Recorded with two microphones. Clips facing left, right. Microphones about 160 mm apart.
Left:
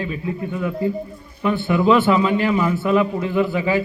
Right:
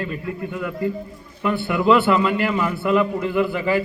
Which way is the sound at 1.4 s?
15° left (ahead or behind).